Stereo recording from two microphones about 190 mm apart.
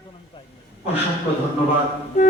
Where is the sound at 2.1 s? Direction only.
40° left (ahead or behind).